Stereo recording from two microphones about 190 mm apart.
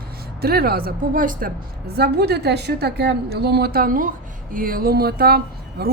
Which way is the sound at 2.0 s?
60° right (ahead or behind).